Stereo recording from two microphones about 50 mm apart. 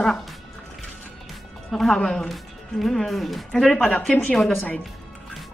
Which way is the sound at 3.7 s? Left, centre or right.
Centre.